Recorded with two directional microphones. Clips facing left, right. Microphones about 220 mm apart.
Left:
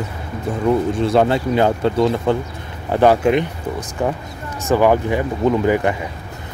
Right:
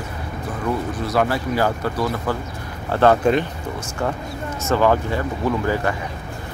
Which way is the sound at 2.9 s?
10° left (ahead or behind).